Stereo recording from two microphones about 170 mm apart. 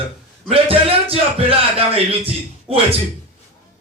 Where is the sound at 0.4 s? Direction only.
35° right (ahead or behind).